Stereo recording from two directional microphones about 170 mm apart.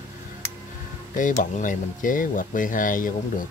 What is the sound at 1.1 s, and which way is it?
Speech, 50° left (ahead or behind).